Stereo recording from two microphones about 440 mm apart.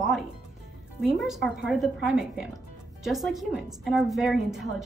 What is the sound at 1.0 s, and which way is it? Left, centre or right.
A woman's voice, centre.